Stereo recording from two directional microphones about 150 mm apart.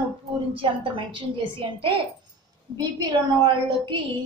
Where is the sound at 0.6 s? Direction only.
35° right (ahead or behind).